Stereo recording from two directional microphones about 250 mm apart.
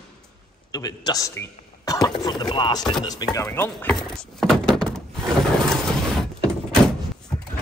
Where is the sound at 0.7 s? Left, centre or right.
Centre.